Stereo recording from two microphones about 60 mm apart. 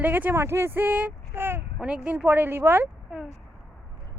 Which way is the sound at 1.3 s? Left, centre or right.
Right.